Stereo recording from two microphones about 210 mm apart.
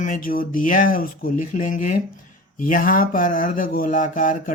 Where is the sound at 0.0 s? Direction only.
40° left (ahead or behind).